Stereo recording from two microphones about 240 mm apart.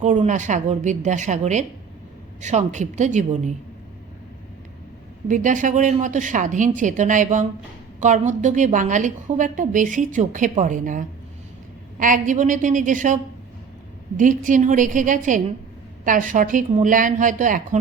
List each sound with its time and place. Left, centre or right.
0.0 s a woman's voice: right
5.3 s a woman's voice: right
14.2 s a woman's voice: right